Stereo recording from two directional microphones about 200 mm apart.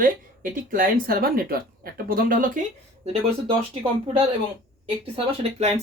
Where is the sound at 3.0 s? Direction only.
25° right (ahead or behind).